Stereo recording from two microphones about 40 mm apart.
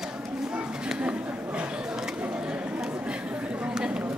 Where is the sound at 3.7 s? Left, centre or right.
Right.